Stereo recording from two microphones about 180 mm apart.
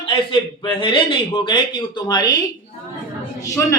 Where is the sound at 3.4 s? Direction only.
15° left (ahead or behind).